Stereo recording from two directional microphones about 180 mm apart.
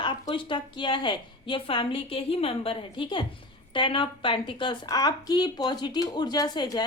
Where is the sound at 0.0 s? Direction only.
25° left (ahead or behind).